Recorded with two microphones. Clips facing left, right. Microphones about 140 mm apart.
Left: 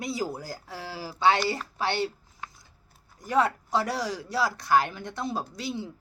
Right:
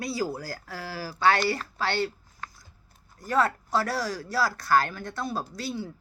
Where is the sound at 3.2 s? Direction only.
20° left (ahead or behind).